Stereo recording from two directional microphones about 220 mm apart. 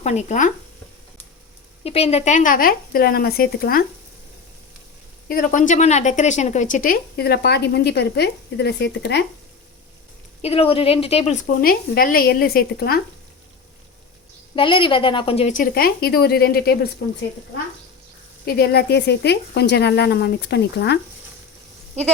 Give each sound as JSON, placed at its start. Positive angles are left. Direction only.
{"t": 0.0, "sound": "a woman's voice", "side_deg": 30}
{"t": 1.8, "sound": "a woman's voice", "side_deg": 30}
{"t": 5.3, "sound": "a woman's voice", "side_deg": 40}
{"t": 10.4, "sound": "a woman's voice", "side_deg": 25}
{"t": 14.5, "sound": "a woman's voice", "side_deg": 25}
{"t": 18.4, "sound": "speech", "side_deg": 45}